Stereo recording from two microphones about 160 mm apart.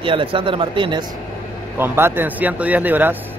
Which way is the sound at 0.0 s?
35° right (ahead or behind).